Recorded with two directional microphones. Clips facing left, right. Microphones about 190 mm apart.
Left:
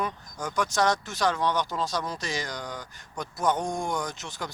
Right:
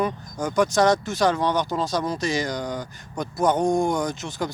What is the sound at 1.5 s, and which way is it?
Speech, 40° right (ahead or behind).